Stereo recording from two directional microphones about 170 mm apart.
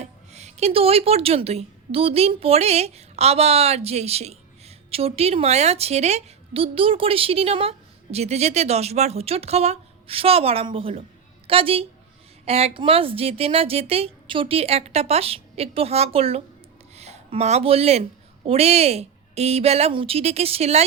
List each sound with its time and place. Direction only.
0.0 s speech: 40° right (ahead or behind)